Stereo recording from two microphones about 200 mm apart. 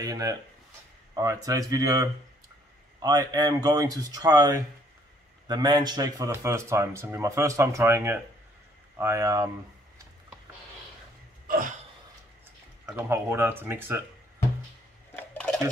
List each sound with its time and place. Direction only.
0.0 s speech: 20° right (ahead or behind)
11.4 s hiccup: 45° right (ahead or behind)
12.8 s speech: 10° right (ahead or behind)
15.1 s dishes: 5° left (ahead or behind)